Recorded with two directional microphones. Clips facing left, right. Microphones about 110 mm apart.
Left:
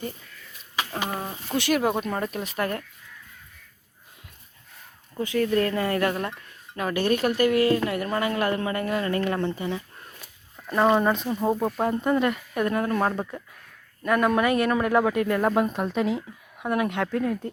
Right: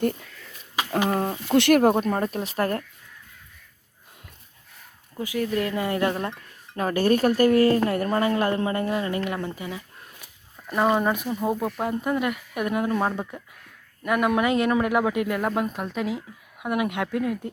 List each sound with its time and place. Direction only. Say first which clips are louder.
0.9 s speech: right 10 dB; 55° right (ahead or behind); by 2.8 s 35° right (ahead or behind)
5.1 s speech: left 3 dB; 10° right (ahead or behind)
6.7 s speech: right 3 dB; 35° right (ahead or behind); by 15.4 s 15° right (ahead or behind)
15.4 s speech: left 3 dB; centre (ahead or behind); by 17.3 s 15° right (ahead or behind)